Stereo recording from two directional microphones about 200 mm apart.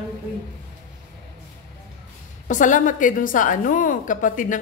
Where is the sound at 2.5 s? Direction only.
40° left (ahead or behind).